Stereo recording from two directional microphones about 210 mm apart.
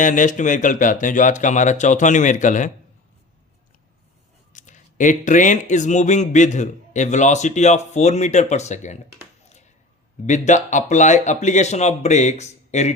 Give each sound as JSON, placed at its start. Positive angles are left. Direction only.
{"t": 0.0, "sound": "speech", "side_deg": 35}
{"t": 4.5, "sound": "speech", "side_deg": 35}
{"t": 10.2, "sound": "speech", "side_deg": 35}